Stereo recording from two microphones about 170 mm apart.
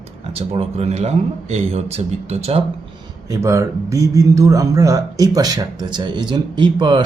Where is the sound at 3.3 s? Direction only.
15° right (ahead or behind).